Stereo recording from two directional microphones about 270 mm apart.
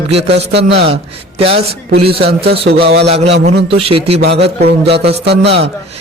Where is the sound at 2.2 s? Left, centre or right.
Right.